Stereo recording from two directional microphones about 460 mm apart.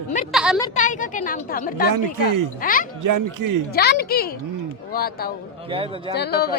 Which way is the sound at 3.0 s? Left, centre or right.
Right.